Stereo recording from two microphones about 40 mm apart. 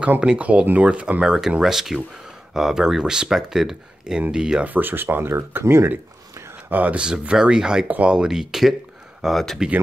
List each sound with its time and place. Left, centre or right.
0.4 s speech: right
1.2 s speech: centre
4.6 s speech: right
6.7 s speech: right
7.0 s speech: right
8.3 s speech: centre